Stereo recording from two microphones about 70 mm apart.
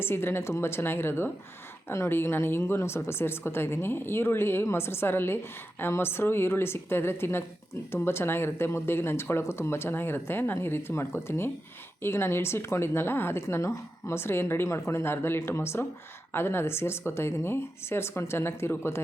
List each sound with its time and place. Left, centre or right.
0.0 s speech: left